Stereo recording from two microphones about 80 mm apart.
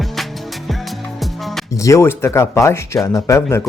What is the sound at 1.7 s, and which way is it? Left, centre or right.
Music, left.